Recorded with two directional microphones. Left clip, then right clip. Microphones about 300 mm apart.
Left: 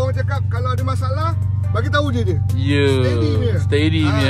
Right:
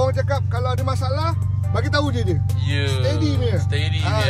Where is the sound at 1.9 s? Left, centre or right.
Centre.